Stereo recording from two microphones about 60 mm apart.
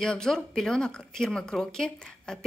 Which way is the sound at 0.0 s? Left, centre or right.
Centre.